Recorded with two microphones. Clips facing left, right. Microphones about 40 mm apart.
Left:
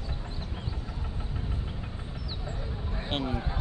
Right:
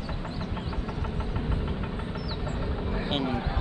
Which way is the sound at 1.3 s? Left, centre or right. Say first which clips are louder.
Right 5 dB; right.